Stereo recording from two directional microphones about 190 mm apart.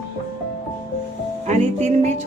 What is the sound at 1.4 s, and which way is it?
Speech, 40° right (ahead or behind).